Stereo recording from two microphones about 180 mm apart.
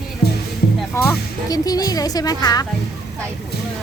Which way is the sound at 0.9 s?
10° left (ahead or behind).